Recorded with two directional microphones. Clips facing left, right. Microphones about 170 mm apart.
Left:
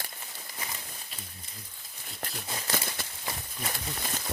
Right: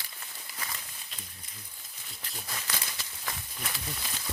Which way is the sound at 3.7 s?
50° left (ahead or behind).